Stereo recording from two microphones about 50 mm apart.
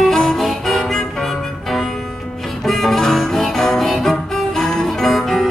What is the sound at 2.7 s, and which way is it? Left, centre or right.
Music, centre.